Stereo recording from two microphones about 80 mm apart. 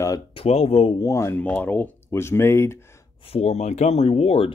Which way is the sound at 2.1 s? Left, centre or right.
Left.